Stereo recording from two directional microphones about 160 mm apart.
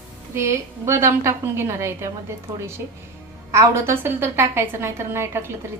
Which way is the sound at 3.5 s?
15° right (ahead or behind).